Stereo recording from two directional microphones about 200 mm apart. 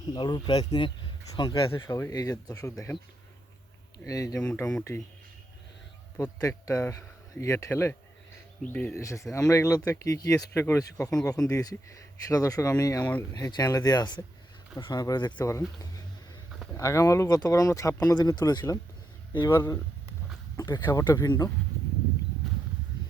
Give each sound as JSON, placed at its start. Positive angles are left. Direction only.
{"t": 0.1, "sound": "speech", "side_deg": 20}
{"t": 1.7, "sound": "speech", "side_deg": 15}
{"t": 4.0, "sound": "speech", "side_deg": 15}
{"t": 4.4, "sound": "speech", "side_deg": 5}
{"t": 6.1, "sound": "speech", "side_deg": 15}